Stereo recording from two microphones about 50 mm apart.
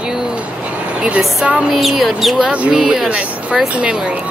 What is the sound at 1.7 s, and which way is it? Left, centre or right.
Speech, centre.